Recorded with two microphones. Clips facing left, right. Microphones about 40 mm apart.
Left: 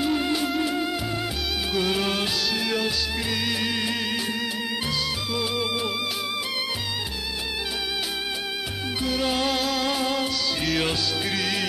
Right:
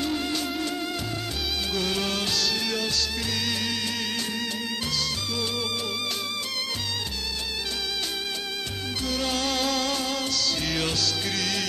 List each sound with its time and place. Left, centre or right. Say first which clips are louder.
0.0 s music: left 4 dB; centre
5.3 s music: left 5 dB; centre
9.0 s music: left 3 dB; centre